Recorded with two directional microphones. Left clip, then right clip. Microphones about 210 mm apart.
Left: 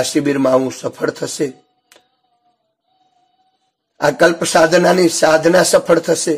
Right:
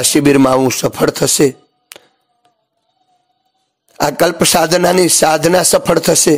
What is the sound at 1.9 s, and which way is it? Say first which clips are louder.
Tap: right 11 dB; 40° right (ahead or behind).